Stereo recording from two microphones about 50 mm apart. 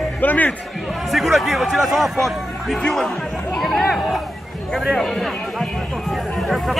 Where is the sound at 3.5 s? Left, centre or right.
Centre.